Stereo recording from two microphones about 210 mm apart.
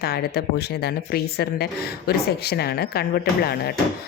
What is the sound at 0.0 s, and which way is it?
A woman's voice, 45° left (ahead or behind).